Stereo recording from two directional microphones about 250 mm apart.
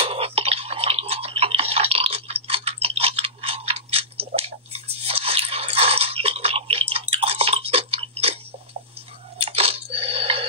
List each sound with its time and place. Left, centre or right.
0.0 s tick-tock: right
9.4 s chewing: right